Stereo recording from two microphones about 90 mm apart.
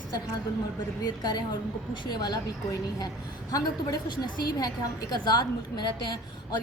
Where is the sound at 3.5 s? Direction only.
45° left (ahead or behind).